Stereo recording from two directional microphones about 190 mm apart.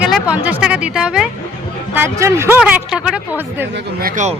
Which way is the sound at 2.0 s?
15° right (ahead or behind).